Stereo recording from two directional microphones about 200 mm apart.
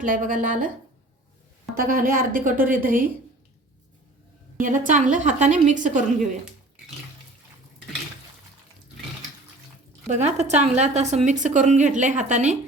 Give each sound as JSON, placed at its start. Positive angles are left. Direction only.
{"t": 0.0, "sound": "speech", "side_deg": -40}
{"t": 1.7, "sound": "speech", "side_deg": -45}
{"t": 4.5, "sound": "a woman's voice", "side_deg": -40}
{"t": 10.1, "sound": "a woman's voice", "side_deg": -35}